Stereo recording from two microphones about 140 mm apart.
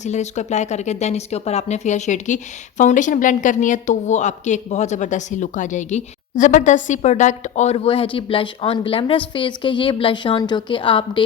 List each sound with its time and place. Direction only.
0.0 s a woman's voice: 55° left (ahead or behind); by 11.2 s 40° left (ahead or behind)